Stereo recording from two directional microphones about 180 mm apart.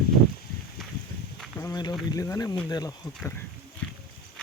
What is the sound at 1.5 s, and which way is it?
Speech, 20° left (ahead or behind).